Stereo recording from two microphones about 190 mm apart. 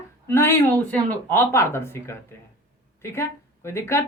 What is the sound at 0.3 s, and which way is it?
Speech, 10° left (ahead or behind).